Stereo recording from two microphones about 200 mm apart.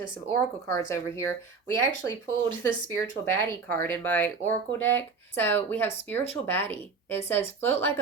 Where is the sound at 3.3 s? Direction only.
15° left (ahead or behind).